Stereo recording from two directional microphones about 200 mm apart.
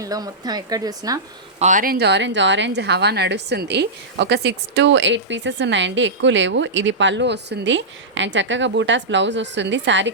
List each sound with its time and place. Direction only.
0.0 s speech: 20° right (ahead or behind)
1.5 s a woman's voice: 40° right (ahead or behind); by 10.1 s 65° right (ahead or behind)